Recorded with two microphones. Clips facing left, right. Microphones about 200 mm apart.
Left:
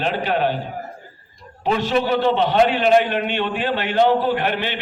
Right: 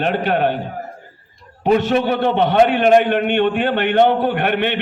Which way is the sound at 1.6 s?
50° right (ahead or behind).